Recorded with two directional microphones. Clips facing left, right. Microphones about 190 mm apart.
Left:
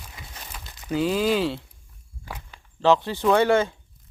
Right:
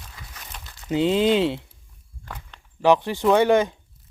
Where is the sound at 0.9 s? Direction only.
25° right (ahead or behind).